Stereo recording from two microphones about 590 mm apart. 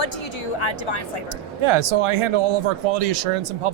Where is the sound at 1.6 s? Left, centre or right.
Right.